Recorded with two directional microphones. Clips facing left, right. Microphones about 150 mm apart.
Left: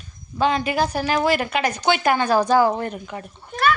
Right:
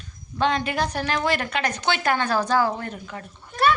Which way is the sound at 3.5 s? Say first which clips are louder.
Even; 30° right (ahead or behind).